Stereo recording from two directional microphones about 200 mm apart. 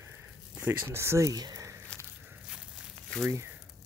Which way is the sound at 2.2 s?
5° right (ahead or behind).